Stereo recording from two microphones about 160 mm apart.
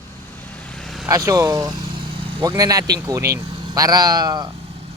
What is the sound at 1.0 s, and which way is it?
Speech, 20° right (ahead or behind).